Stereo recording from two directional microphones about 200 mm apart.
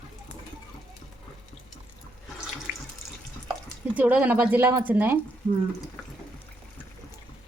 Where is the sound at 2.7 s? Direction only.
60° right (ahead or behind).